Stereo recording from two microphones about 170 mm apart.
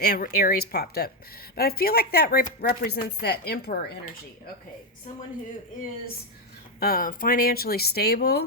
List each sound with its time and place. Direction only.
0.1 s speech: 60° left (ahead or behind)
6.7 s speech: 60° left (ahead or behind)